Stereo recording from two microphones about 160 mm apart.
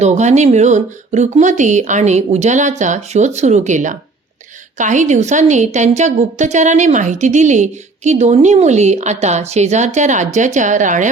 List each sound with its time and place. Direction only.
0.0 s a woman's voice: 45° right (ahead or behind)